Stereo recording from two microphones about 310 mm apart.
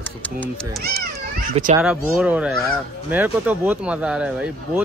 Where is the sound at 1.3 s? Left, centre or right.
Right.